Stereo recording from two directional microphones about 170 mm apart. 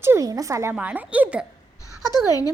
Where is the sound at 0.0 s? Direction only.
15° right (ahead or behind).